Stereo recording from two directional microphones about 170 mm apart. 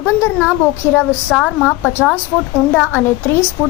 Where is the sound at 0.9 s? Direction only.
10° left (ahead or behind).